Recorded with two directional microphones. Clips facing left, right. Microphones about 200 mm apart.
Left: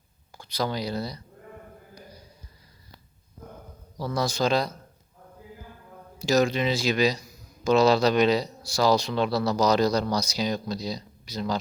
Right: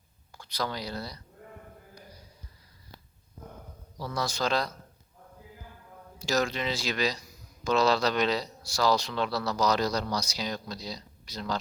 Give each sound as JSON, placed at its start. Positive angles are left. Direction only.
{"t": 0.3, "sound": "speech", "side_deg": 15}
{"t": 3.9, "sound": "a man's voice", "side_deg": 40}
{"t": 4.2, "sound": "a man's voice", "side_deg": 15}
{"t": 6.2, "sound": "a man's voice", "side_deg": 15}
{"t": 10.3, "sound": "a man's voice", "side_deg": 15}